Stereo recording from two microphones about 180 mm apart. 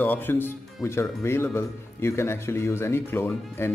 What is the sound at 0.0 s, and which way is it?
Speech, 10° left (ahead or behind).